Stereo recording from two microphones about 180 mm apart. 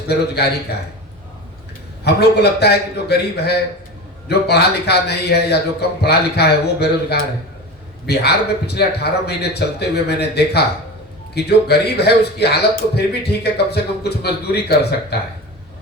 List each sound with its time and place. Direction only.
0.1 s a man's voice: 65° left (ahead or behind)
2.0 s a man's voice: 65° left (ahead or behind)